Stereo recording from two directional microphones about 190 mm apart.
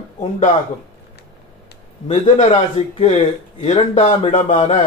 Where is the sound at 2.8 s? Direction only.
35° left (ahead or behind).